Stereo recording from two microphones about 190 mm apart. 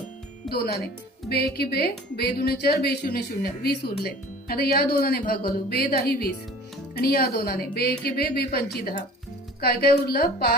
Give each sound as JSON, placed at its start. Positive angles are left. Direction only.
{"t": 0.5, "sound": "a woman's voice", "side_deg": 55}